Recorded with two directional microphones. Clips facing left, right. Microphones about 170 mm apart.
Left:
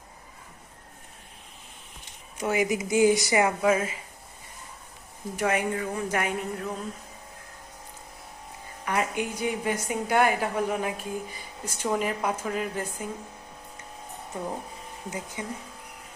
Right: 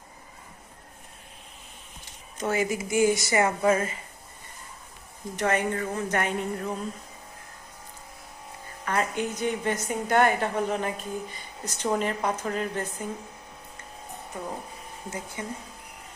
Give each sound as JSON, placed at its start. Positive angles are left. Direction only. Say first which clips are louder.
{"t": 2.4, "sound": "a woman's voice", "louder": "left 1 dB", "side_deg": 15}
{"t": 5.4, "sound": "a woman's voice", "louder": "right 1 dB", "side_deg": 10}
{"t": 8.8, "sound": "a woman's voice", "louder": "even", "side_deg": 10}
{"t": 15.1, "sound": "a woman's voice", "louder": "even", "side_deg": 15}